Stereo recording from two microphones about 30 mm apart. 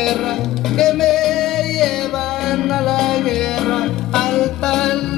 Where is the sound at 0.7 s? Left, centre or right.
Centre.